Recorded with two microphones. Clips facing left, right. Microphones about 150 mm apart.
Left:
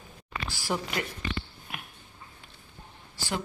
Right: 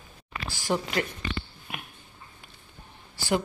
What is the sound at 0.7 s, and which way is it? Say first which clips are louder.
Speech: right 4 dB; centre (ahead or behind).